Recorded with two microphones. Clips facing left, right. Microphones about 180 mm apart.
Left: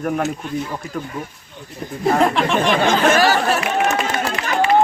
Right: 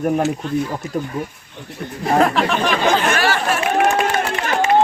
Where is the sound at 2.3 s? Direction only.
5° right (ahead or behind).